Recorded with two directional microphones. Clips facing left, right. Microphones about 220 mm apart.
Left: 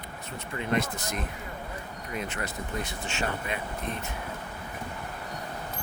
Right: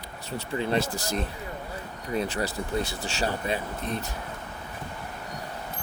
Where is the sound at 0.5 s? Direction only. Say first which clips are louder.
Right 2 dB; 30° right (ahead or behind).